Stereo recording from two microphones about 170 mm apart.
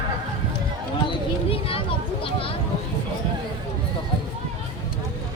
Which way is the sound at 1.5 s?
35° left (ahead or behind).